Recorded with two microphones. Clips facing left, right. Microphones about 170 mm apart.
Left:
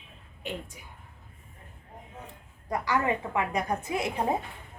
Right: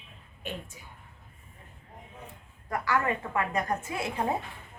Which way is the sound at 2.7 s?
20° left (ahead or behind).